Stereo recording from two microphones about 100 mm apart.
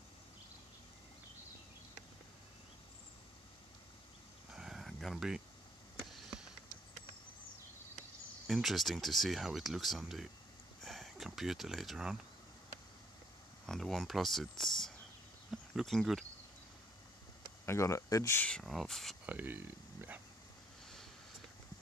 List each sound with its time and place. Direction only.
4.6 s a sound: 5° right (ahead or behind)
8.5 s speech: centre (ahead or behind)
13.7 s speech: centre (ahead or behind)
17.6 s speech: 30° left (ahead or behind)
18.6 s speech: centre (ahead or behind)
19.2 s a sound: 20° right (ahead or behind)